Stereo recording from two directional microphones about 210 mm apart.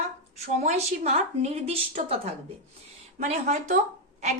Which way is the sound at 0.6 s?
30° right (ahead or behind).